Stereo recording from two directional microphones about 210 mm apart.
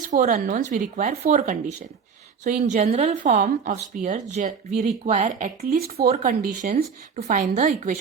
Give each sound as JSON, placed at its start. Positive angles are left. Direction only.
{"t": 0.1, "sound": "speech", "side_deg": -35}
{"t": 6.7, "sound": "speech", "side_deg": -35}